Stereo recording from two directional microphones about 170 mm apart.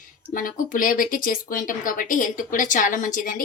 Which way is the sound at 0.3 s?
55° left (ahead or behind).